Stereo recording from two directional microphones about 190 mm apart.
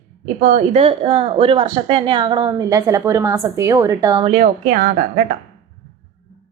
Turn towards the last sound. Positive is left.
turn(degrees=-45)  # may be behind; listen again after turning